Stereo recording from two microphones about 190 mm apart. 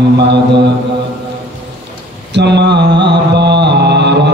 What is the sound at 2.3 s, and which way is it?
Mantra, 65° right (ahead or behind).